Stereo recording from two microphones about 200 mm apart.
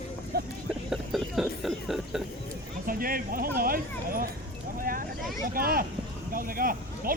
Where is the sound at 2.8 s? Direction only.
45° right (ahead or behind).